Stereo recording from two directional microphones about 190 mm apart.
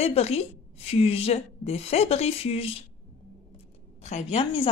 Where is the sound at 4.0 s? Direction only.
35° left (ahead or behind).